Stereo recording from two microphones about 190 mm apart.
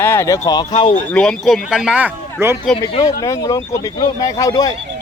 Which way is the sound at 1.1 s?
5° left (ahead or behind).